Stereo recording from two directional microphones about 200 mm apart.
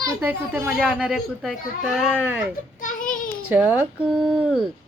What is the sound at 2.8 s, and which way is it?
Child singing, 40° left (ahead or behind).